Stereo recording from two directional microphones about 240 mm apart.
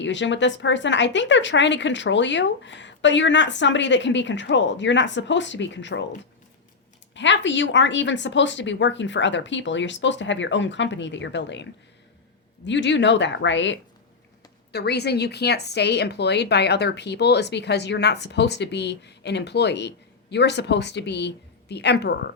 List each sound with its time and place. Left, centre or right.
0.0 s a woman's voice: left
7.1 s a woman's voice: left